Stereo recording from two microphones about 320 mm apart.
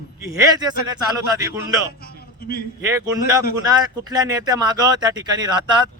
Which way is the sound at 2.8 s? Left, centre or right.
Centre.